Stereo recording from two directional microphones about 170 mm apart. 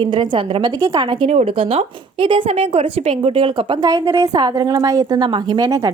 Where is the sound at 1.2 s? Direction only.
35° right (ahead or behind).